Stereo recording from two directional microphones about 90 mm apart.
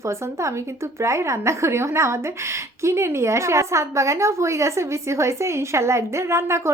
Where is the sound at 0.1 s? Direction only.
30° right (ahead or behind).